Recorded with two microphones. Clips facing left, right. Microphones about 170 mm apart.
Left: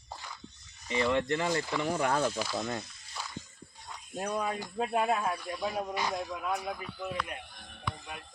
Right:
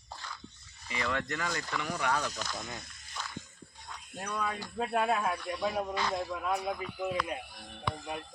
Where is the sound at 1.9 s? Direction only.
45° left (ahead or behind).